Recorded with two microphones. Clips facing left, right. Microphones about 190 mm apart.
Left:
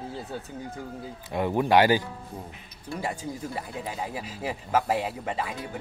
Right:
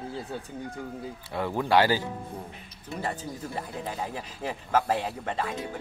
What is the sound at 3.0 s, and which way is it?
Speech, 10° left (ahead or behind).